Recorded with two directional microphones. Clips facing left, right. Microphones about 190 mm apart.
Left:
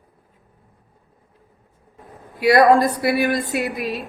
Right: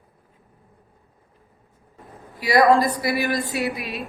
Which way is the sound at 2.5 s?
Centre (ahead or behind).